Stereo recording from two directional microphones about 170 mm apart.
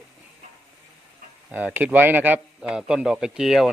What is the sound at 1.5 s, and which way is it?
A man's voice, 10° right (ahead or behind).